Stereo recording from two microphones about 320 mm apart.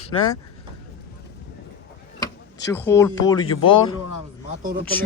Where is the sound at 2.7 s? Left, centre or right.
Centre.